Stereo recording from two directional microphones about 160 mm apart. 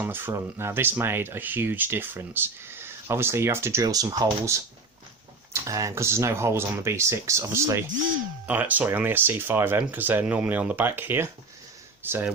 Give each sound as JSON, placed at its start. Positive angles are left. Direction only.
{"t": 0.0, "sound": "speech", "side_deg": -15}
{"t": 5.6, "sound": "speech", "side_deg": -20}